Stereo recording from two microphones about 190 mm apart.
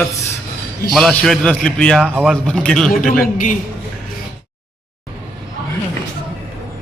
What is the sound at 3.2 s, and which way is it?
Speech, 45° left (ahead or behind).